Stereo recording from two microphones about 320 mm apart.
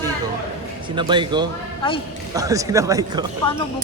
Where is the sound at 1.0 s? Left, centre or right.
Centre.